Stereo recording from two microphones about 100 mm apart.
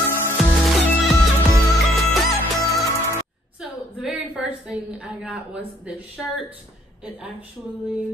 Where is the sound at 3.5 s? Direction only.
5° right (ahead or behind).